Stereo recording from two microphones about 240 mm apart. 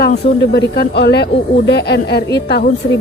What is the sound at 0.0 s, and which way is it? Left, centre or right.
Speech, left.